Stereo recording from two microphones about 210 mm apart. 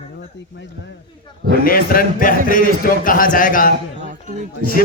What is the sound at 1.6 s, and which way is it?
A man's voice, 45° left (ahead or behind).